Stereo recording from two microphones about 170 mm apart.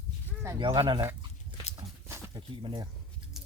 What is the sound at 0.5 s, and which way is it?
Speech, 25° right (ahead or behind).